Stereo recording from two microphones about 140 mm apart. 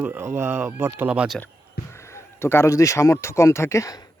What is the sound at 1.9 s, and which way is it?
Speech, 20° left (ahead or behind).